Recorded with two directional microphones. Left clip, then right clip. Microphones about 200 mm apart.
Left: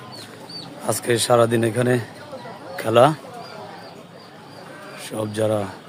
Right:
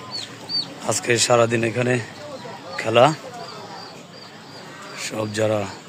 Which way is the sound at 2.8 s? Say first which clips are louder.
Even; 20° left (ahead or behind).